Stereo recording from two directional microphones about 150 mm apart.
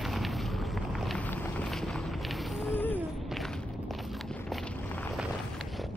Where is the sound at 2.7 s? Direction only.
10° left (ahead or behind).